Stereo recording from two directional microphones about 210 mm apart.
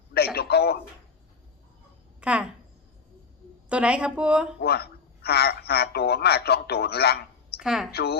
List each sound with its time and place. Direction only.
0.3 s speech: 50° left (ahead or behind)
2.2 s speech: 5° right (ahead or behind)
3.7 s speech: 5° right (ahead or behind)
4.6 s a man's voice: 50° left (ahead or behind)
7.6 s speech: centre (ahead or behind)
7.9 s speech: 50° left (ahead or behind)